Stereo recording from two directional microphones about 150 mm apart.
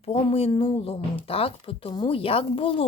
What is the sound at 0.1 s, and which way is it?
Speech, 40° left (ahead or behind).